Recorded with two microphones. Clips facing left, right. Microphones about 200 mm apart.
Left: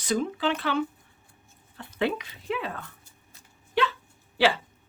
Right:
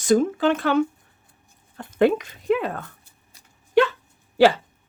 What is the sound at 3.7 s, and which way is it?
Dog, 50° right (ahead or behind).